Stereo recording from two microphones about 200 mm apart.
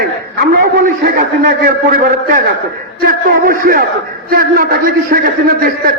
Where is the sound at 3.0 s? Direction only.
45° right (ahead or behind).